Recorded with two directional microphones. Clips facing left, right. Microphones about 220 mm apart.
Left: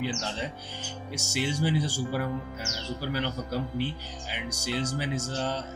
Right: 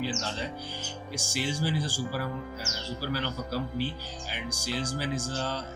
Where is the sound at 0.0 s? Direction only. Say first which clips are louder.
Left 1 dB; 20° left (ahead or behind).